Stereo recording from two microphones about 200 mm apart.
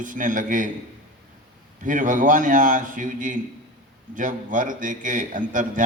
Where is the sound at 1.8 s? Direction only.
40° right (ahead or behind).